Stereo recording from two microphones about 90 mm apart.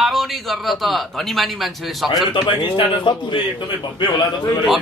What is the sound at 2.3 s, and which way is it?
A man's voice, 70° left (ahead or behind).